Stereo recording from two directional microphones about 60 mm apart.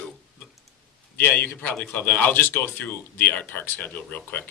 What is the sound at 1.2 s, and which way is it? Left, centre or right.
Speech, left.